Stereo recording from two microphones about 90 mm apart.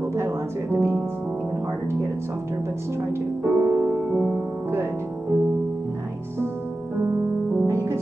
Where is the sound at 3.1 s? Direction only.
25° right (ahead or behind).